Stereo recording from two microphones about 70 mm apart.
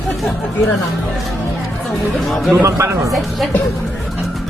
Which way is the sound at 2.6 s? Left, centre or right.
Right.